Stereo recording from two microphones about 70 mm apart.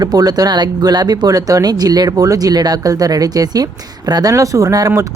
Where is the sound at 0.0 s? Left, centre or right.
Right.